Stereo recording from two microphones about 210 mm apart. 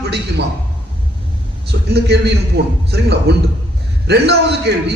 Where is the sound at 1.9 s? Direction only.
50° right (ahead or behind).